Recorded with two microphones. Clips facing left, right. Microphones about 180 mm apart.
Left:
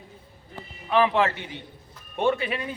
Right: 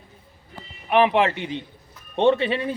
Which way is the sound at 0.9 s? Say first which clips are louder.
Right 3 dB; 20° right (ahead or behind).